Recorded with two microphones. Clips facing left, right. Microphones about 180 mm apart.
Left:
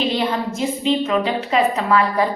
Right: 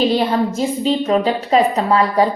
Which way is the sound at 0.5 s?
35° right (ahead or behind).